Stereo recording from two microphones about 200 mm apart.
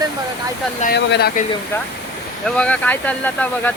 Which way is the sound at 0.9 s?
55° left (ahead or behind).